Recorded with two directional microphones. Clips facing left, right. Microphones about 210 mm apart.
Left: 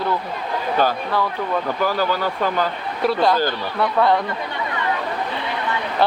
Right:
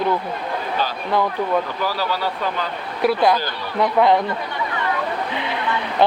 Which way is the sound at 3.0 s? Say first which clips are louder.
Even; 10° right (ahead or behind).